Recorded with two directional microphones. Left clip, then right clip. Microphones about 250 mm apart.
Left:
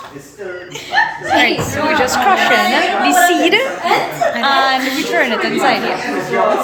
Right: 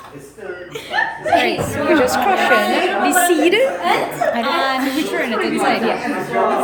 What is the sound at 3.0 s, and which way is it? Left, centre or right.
A woman's voice, centre.